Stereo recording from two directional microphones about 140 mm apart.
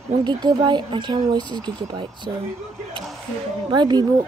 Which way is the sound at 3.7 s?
30° right (ahead or behind).